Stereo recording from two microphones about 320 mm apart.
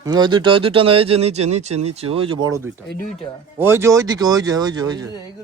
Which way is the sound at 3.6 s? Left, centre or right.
Centre.